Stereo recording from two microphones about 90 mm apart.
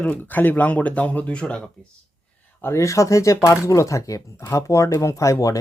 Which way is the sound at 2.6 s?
35° left (ahead or behind).